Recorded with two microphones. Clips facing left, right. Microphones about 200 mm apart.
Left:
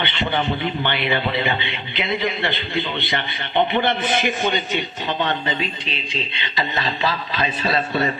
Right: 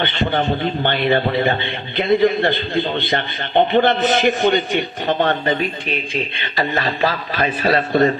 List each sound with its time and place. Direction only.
0.0 s a man's voice: 50° right (ahead or behind)